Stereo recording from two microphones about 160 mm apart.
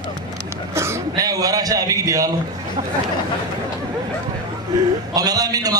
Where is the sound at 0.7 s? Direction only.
15° right (ahead or behind).